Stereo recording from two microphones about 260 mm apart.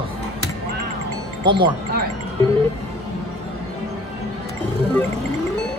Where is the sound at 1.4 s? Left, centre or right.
Centre.